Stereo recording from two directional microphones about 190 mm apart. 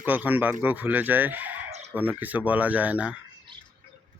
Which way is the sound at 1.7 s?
35° right (ahead or behind).